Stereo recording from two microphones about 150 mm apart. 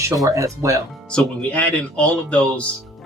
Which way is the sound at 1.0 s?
10° left (ahead or behind).